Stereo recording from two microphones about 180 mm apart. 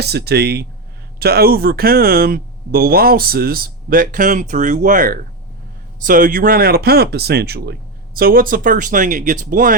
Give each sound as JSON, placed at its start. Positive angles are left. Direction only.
{"t": 0.0, "sound": "speech", "side_deg": -65}